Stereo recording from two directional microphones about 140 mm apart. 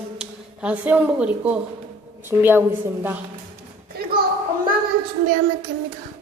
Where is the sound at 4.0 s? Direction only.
90° right.